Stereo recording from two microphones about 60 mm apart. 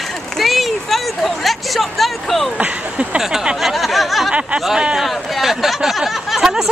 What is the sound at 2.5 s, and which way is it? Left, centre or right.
Speech, centre.